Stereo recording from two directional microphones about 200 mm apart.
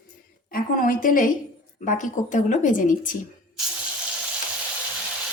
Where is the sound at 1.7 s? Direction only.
40° left (ahead or behind).